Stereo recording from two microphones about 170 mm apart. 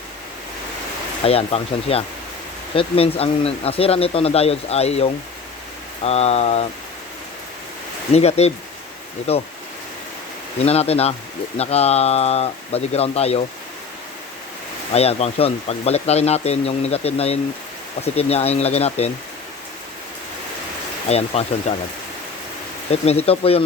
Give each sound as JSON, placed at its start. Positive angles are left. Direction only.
{"t": 1.2, "sound": "speech", "side_deg": 35}
{"t": 8.1, "sound": "speech", "side_deg": 40}
{"t": 10.7, "sound": "speech", "side_deg": 35}
{"t": 14.9, "sound": "speech", "side_deg": 35}
{"t": 21.1, "sound": "speech", "side_deg": 40}
{"t": 22.9, "sound": "speech", "side_deg": 35}